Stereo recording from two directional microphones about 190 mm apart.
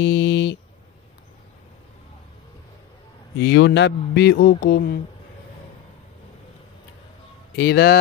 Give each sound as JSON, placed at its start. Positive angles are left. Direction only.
{"t": 0.0, "sound": "speech", "side_deg": 65}
{"t": 3.3, "sound": "a man's voice", "side_deg": 60}
{"t": 7.5, "sound": "a man's voice", "side_deg": 55}